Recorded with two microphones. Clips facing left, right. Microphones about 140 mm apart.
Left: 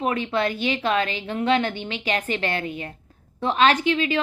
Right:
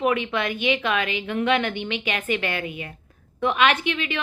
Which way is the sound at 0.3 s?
35° left (ahead or behind).